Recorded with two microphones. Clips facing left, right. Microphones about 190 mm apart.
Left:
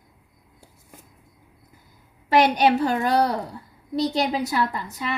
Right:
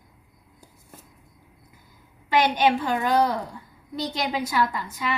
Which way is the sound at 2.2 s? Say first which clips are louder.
Left 3 dB; 40° left (ahead or behind).